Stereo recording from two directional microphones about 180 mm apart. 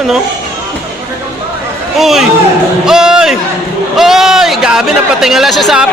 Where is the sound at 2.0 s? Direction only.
Centre (ahead or behind).